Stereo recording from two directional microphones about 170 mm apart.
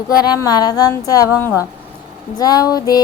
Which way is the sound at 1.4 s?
10° left (ahead or behind).